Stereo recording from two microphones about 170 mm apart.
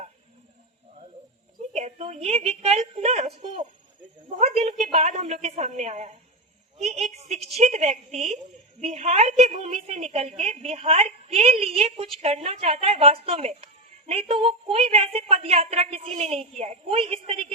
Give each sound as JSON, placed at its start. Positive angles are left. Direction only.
{"t": 1.7, "sound": "a woman's voice", "side_deg": -40}